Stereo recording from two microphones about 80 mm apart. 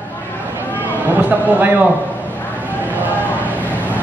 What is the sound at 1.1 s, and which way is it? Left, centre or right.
Speech, right.